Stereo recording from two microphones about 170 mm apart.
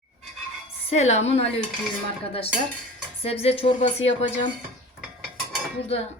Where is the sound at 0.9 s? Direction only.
40° left (ahead or behind).